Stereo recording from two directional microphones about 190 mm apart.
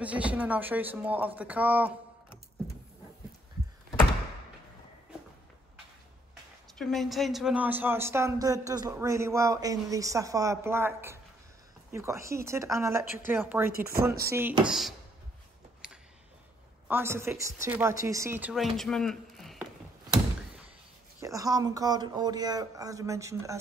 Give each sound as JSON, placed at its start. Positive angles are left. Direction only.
{"t": 0.0, "sound": "speech", "side_deg": -5}
{"t": 6.8, "sound": "speech", "side_deg": 0}
{"t": 15.8, "sound": "a sound", "side_deg": -5}
{"t": 16.8, "sound": "speech", "side_deg": -10}
{"t": 21.2, "sound": "speech", "side_deg": -15}